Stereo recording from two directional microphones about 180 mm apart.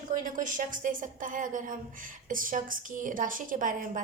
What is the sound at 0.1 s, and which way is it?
A woman's voice, 45° right (ahead or behind).